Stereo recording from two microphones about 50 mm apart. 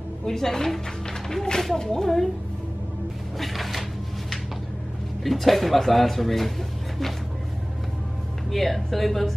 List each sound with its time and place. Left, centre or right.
0.2 s speech: centre
3.3 s speech: centre
5.2 s speech: centre
8.5 s speech: centre